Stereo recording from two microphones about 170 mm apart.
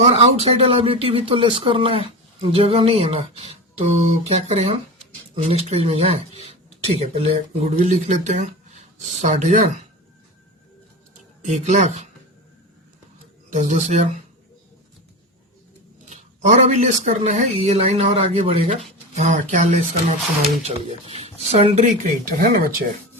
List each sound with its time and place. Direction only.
0.0 s speech: 35° right (ahead or behind)
11.4 s speech: 40° right (ahead or behind)
13.5 s speech: 45° right (ahead or behind)
16.0 s speech: 45° right (ahead or behind)
22.3 s speech: 55° right (ahead or behind)